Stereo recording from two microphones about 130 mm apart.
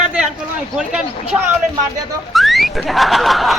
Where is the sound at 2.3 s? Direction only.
Centre (ahead or behind).